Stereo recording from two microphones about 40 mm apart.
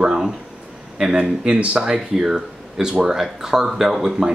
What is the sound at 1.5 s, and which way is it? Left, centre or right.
Speech, right.